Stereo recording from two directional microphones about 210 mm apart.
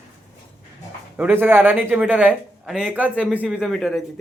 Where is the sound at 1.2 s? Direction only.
10° right (ahead or behind).